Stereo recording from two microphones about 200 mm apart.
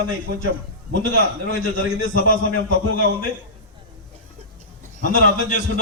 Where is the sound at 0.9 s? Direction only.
45° left (ahead or behind).